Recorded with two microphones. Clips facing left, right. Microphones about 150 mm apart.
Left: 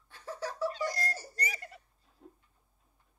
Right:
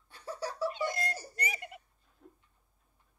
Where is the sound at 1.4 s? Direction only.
20° right (ahead or behind).